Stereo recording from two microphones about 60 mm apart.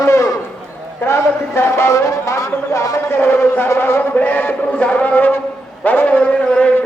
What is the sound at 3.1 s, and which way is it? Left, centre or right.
Speech, left.